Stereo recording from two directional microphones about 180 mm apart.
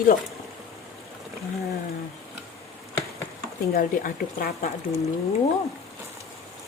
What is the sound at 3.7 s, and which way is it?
Speech, 55° left (ahead or behind).